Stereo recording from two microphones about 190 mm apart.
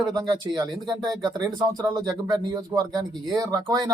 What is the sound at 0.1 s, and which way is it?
Speech, 20° right (ahead or behind).